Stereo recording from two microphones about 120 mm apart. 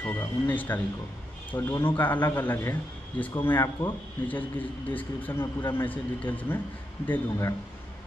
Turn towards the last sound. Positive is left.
turn(degrees=25)  # may be behind; listen again after turning